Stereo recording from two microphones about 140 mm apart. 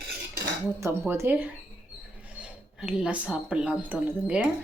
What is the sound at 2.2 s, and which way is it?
Speech, 10° right (ahead or behind).